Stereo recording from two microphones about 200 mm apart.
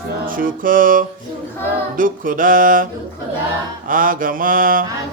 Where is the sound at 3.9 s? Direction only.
45° right (ahead or behind).